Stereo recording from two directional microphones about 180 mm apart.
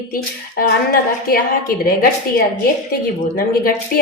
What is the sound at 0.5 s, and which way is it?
A woman's voice, 55° left (ahead or behind).